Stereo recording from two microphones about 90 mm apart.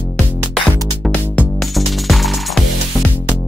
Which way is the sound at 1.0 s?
15° left (ahead or behind).